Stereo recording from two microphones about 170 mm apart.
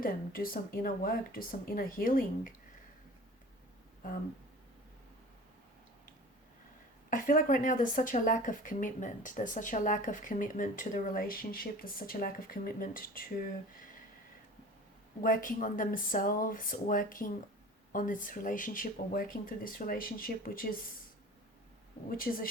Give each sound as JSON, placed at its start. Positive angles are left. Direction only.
{"t": 0.0, "sound": "speech", "side_deg": 55}
{"t": 7.1, "sound": "a woman's voice", "side_deg": 50}
{"t": 15.2, "sound": "speech", "side_deg": 55}
{"t": 22.1, "sound": "speech", "side_deg": 60}